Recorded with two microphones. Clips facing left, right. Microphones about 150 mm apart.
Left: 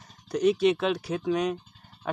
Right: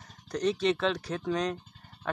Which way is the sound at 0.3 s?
10° left (ahead or behind).